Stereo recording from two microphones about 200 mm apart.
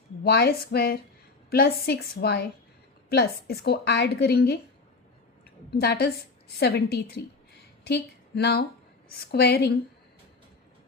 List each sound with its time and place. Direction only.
0.3 s a woman's voice: 50° left (ahead or behind)
5.7 s a woman's voice: 55° left (ahead or behind)